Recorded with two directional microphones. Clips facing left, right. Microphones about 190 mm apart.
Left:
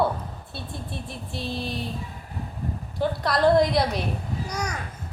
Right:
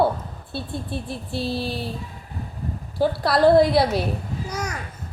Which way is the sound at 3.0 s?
35° right (ahead or behind).